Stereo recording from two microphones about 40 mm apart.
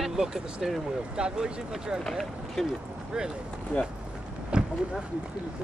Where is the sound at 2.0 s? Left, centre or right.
Centre.